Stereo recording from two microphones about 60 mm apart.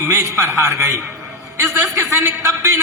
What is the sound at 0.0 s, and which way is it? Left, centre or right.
A man's voice, right.